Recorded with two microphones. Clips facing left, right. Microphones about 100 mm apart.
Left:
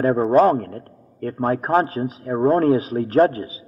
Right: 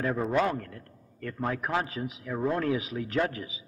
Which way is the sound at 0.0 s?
40° left (ahead or behind).